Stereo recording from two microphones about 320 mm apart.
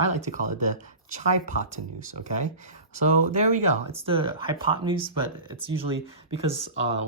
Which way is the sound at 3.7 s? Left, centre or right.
Centre.